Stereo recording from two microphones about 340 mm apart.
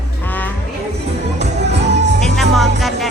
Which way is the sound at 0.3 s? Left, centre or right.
Centre.